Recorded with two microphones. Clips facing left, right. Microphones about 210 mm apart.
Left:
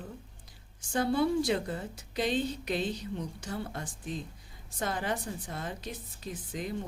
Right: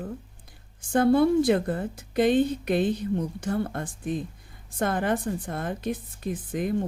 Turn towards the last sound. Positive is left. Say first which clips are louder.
# right 9 dB
turn(degrees=-55)  # may be behind; listen again after turning